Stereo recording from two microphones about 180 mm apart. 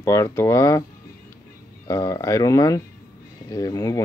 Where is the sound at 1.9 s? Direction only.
20° left (ahead or behind).